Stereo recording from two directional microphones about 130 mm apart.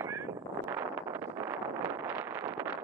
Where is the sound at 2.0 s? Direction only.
15° right (ahead or behind).